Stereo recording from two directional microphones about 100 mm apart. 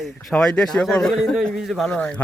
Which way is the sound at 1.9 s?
10° left (ahead or behind).